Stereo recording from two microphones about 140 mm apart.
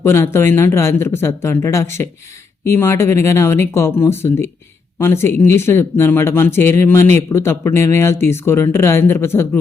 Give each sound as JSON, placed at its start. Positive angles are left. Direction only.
{"t": 0.0, "sound": "speech", "side_deg": 20}